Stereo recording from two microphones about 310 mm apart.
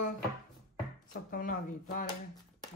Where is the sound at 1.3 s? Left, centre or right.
Left.